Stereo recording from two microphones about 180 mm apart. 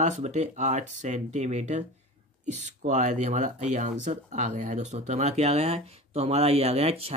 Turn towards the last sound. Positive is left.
turn(degrees=-35)  # may be behind; listen again after turning